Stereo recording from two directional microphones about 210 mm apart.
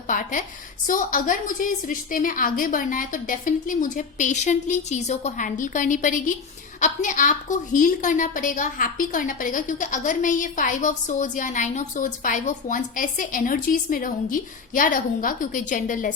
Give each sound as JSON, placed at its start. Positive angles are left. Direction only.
{"t": 0.1, "sound": "a woman's voice", "side_deg": 40}